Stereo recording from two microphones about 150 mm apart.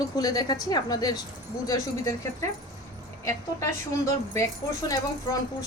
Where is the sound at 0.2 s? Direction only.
25° left (ahead or behind).